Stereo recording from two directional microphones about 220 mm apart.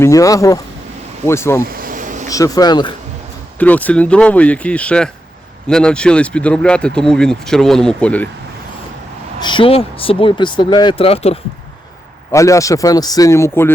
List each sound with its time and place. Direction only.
0.0 s speech: 15° left (ahead or behind)
1.6 s vehicle: 40° right (ahead or behind)
2.3 s speech: 15° left (ahead or behind)
3.6 s speech: 5° left (ahead or behind)
9.4 s speech: 20° left (ahead or behind)
12.3 s speech: 15° left (ahead or behind)